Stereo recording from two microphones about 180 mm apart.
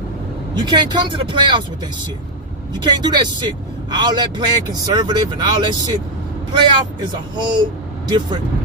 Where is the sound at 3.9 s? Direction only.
25° right (ahead or behind).